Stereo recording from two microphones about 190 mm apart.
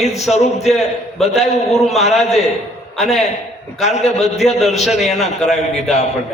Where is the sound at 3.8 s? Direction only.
35° left (ahead or behind).